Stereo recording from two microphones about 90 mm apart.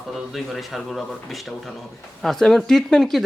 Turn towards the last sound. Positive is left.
turn(degrees=0)  # may be behind; listen again after turning